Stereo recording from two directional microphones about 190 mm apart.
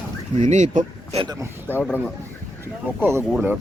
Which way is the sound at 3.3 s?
5° right (ahead or behind).